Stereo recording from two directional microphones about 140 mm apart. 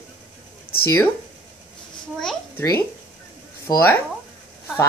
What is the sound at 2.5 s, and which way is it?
Speech, 25° left (ahead or behind).